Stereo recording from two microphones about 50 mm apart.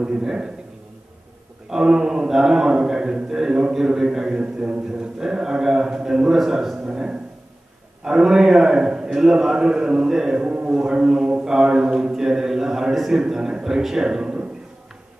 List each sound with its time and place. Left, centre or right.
0.0 s a man's voice: centre
1.7 s a man's voice: centre